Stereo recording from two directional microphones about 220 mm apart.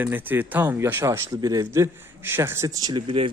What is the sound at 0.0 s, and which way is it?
Speech, 10° right (ahead or behind).